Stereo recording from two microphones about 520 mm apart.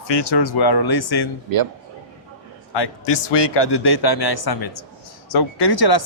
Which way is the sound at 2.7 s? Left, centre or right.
Left.